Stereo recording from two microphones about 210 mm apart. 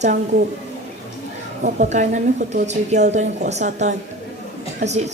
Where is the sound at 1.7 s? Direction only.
35° right (ahead or behind).